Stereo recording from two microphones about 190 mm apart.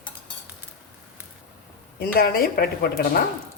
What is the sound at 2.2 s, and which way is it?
Speech, 50° left (ahead or behind).